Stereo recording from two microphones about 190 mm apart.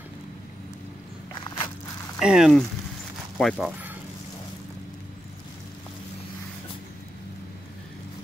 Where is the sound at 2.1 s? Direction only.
5° right (ahead or behind).